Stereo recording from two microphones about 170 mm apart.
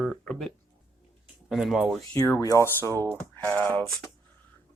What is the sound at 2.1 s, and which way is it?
Speech, 20° left (ahead or behind).